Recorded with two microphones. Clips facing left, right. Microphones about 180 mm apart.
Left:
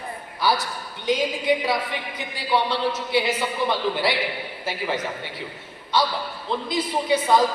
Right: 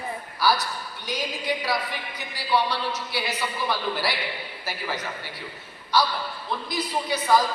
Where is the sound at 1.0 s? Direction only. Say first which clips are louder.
Left 8 dB; 20° left (ahead or behind).